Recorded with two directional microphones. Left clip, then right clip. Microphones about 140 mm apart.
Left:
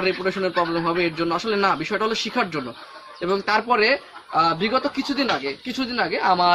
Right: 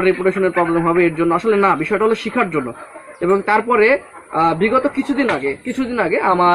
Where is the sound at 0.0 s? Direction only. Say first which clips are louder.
Right 7 dB; 25° left (ahead or behind).